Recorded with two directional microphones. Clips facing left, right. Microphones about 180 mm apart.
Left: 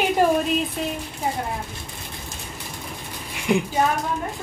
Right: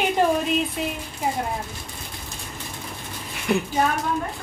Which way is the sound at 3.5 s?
15° left (ahead or behind).